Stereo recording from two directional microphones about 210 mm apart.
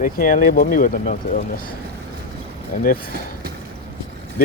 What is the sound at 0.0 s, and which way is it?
Speech, 40° left (ahead or behind).